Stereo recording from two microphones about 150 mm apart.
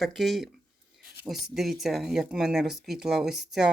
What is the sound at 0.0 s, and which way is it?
Speech, centre (ahead or behind).